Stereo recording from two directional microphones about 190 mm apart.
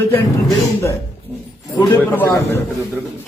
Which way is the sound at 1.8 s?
10° left (ahead or behind).